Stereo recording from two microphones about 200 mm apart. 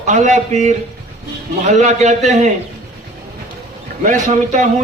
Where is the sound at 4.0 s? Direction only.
40° right (ahead or behind).